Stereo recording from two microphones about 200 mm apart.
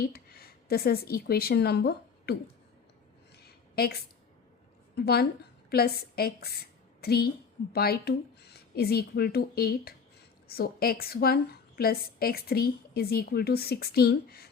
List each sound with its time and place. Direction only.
0.1 s speech: 50° left (ahead or behind)
3.3 s a sound: 50° left (ahead or behind)
4.9 s a woman's voice: 55° left (ahead or behind)